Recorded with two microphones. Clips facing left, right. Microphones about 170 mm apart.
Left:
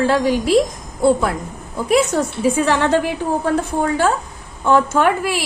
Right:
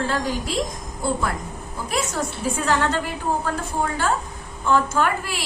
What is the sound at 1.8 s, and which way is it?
A woman's voice, 70° left (ahead or behind).